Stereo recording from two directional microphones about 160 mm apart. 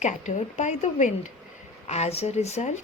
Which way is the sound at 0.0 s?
50° left (ahead or behind).